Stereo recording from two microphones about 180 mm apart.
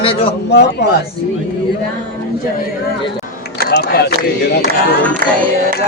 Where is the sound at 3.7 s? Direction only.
60° left (ahead or behind).